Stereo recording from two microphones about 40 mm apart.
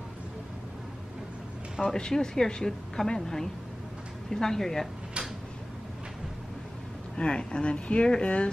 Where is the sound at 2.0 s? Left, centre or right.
Centre.